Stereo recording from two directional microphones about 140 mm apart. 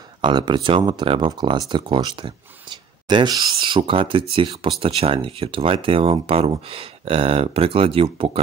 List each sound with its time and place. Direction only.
0.2 s speech: 35° right (ahead or behind)